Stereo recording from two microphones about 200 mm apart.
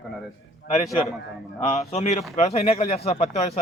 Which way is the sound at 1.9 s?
35° left (ahead or behind).